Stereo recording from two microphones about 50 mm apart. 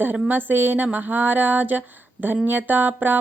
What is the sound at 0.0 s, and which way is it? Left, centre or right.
Mantra, right.